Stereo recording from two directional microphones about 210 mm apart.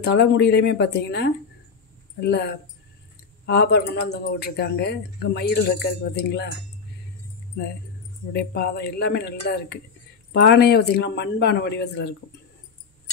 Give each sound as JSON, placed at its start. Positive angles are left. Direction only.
{"t": 0.0, "sound": "speech", "side_deg": 50}
{"t": 8.3, "sound": "speech", "side_deg": 50}